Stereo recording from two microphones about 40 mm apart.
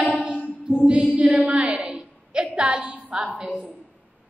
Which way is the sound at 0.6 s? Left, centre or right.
Right.